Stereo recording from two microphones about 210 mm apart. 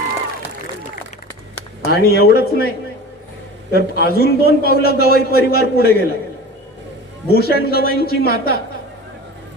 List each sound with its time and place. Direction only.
1.9 s a man's voice: 50° left (ahead or behind)
7.3 s a man's voice: 50° left (ahead or behind)